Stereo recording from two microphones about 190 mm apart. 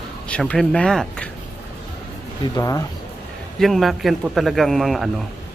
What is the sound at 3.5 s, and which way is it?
Speech, centre (ahead or behind).